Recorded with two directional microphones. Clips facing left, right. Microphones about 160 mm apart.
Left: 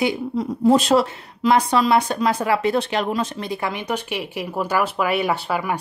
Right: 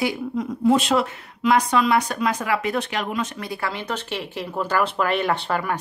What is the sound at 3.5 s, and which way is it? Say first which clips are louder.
Speech: left 3 dB; 20° left (ahead or behind).